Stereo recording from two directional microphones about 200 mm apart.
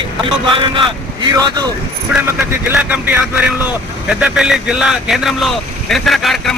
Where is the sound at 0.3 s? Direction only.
25° right (ahead or behind).